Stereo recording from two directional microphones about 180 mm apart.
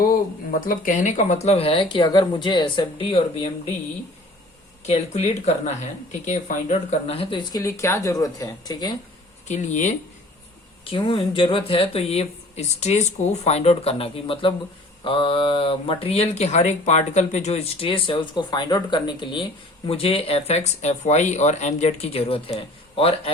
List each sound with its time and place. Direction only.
0.6 s speech: 50° left (ahead or behind); by 3.2 s 30° left (ahead or behind)
4.9 s speech: 40° left (ahead or behind)
7.2 s speech: 25° left (ahead or behind)
9.5 s speech: 40° left (ahead or behind)
10.8 s speech: 30° left (ahead or behind)